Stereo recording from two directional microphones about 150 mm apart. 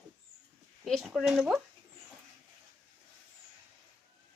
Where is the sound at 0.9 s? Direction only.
Centre (ahead or behind).